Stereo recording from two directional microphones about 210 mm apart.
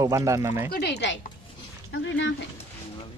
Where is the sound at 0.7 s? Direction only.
50° left (ahead or behind).